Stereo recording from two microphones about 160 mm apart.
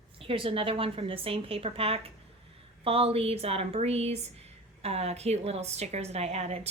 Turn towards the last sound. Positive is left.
turn(degrees=-40)  # may be behind; listen again after turning